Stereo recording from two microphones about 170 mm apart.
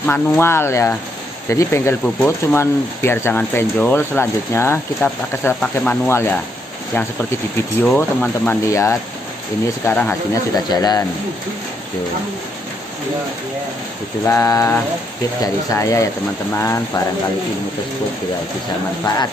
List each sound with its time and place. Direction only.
0.0 s speech: 15° left (ahead or behind)
7.8 s speech: 5° left (ahead or behind)
10.5 s speech: 25° left (ahead or behind)
14.2 s speech: 15° left (ahead or behind)